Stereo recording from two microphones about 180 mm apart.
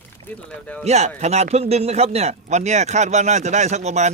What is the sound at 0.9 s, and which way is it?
A man's voice, 40° right (ahead or behind).